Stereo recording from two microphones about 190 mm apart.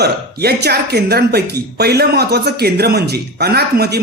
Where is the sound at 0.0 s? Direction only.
60° right (ahead or behind).